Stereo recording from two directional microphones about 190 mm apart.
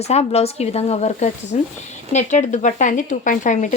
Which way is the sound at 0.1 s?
35° left (ahead or behind).